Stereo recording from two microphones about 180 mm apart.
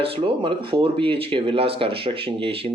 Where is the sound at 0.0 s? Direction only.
30° right (ahead or behind).